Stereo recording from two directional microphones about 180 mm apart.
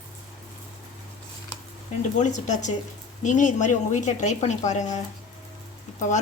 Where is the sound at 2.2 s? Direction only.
40° left (ahead or behind).